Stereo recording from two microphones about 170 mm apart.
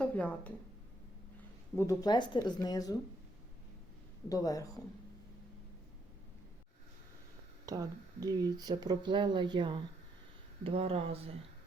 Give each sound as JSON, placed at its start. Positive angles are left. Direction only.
{"t": 0.0, "sound": "speech", "side_deg": 10}
{"t": 1.7, "sound": "speech", "side_deg": 15}
{"t": 4.3, "sound": "speech", "side_deg": 20}
{"t": 7.6, "sound": "speech", "side_deg": -20}